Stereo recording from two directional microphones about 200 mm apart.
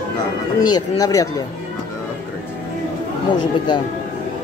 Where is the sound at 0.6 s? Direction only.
20° left (ahead or behind).